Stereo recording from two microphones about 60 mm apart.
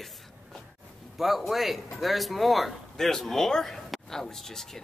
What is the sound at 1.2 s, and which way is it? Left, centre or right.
A woman's voice, centre.